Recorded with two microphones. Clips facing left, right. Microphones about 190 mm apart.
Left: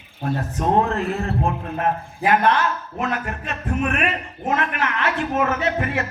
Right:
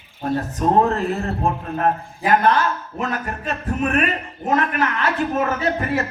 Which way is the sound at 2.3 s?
40° right (ahead or behind).